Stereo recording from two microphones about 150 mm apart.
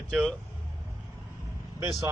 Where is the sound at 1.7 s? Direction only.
20° right (ahead or behind).